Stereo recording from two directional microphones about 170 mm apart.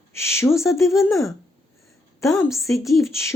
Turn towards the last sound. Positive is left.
turn(degrees=20)  # may be behind; listen again after turning